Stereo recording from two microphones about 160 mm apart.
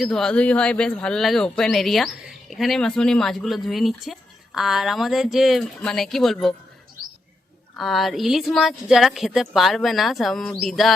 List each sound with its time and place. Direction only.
0.0 s speech: 5° left (ahead or behind)
7.8 s speech: centre (ahead or behind)